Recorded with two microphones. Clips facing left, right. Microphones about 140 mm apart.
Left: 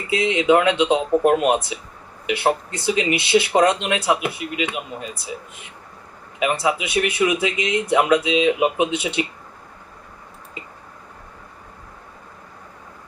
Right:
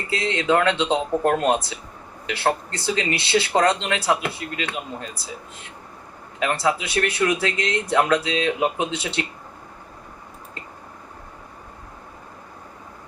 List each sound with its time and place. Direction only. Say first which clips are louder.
0.1 s speech: left 4 dB; 15° left (ahead or behind)
6.4 s speech: left 1 dB; 15° left (ahead or behind)